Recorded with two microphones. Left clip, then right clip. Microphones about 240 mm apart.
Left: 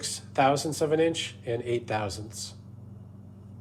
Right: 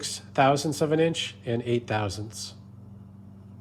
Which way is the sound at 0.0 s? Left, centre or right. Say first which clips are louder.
Right 2 dB; right.